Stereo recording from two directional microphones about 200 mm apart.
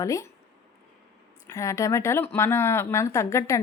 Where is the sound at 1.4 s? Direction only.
15° left (ahead or behind).